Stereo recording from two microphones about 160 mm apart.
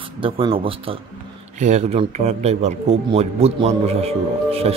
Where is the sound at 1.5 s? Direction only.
45° right (ahead or behind).